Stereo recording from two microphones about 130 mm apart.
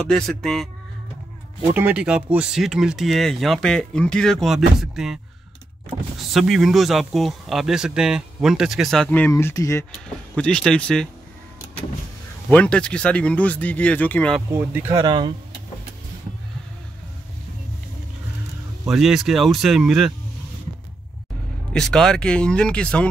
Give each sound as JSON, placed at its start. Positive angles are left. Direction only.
{"t": 0.0, "sound": "speech", "side_deg": 5}
{"t": 1.7, "sound": "speech", "side_deg": -15}
{"t": 9.3, "sound": "speech", "side_deg": 20}
{"t": 10.3, "sound": "speech", "side_deg": 5}
{"t": 12.4, "sound": "speech", "side_deg": 10}
{"t": 14.5, "sound": "speech", "side_deg": -20}
{"t": 15.0, "sound": "speech", "side_deg": -35}
{"t": 18.9, "sound": "speech", "side_deg": -5}
{"t": 21.7, "sound": "speech", "side_deg": 5}